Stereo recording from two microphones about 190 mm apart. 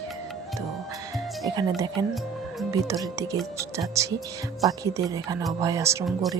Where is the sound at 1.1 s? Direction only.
20° right (ahead or behind).